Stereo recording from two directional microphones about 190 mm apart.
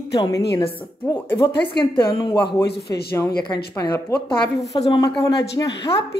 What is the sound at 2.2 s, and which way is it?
Speech, 25° left (ahead or behind).